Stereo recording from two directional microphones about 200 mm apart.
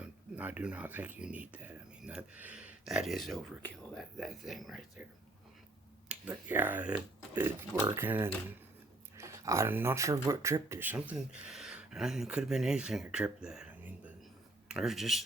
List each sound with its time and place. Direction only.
0.0 s speech: 5° right (ahead or behind)
6.1 s speech: 5° right (ahead or behind)